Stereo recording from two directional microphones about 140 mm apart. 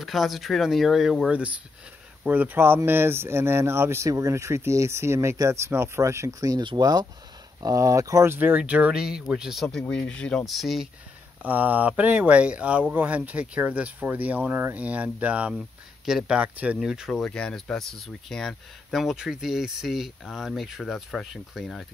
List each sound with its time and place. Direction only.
0.0 s speech: centre (ahead or behind)
11.4 s speech: 10° right (ahead or behind)